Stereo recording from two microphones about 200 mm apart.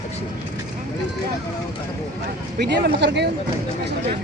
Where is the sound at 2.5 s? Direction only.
55° right (ahead or behind).